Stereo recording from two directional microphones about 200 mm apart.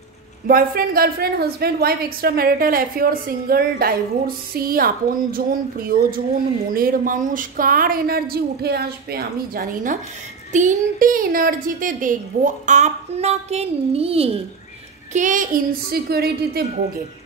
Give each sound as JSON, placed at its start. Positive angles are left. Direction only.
{"t": 0.5, "sound": "a woman's voice", "side_deg": -45}
{"t": 10.5, "sound": "a woman's voice", "side_deg": -40}
{"t": 15.1, "sound": "a woman's voice", "side_deg": -40}